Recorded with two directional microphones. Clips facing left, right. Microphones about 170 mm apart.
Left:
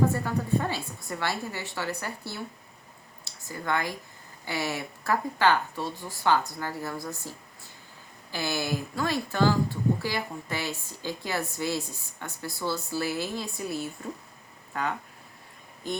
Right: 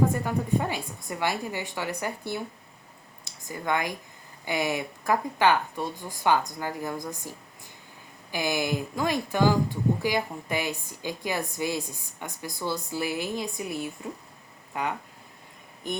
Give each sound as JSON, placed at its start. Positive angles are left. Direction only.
{"t": 0.1, "sound": "speech", "side_deg": -15}